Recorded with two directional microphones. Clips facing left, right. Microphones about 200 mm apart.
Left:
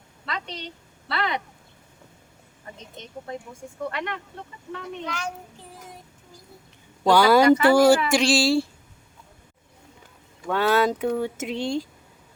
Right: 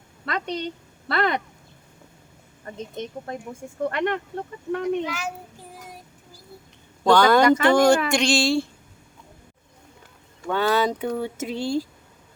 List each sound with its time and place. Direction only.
0.3 s a woman's voice: 50° right (ahead or behind)
2.6 s speech: 45° right (ahead or behind)
5.0 s speech: 5° right (ahead or behind)
7.0 s speech: 10° left (ahead or behind)
10.4 s speech: 5° left (ahead or behind)